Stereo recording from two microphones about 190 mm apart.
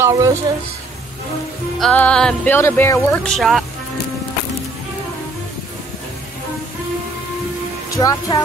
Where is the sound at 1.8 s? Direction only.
5° left (ahead or behind).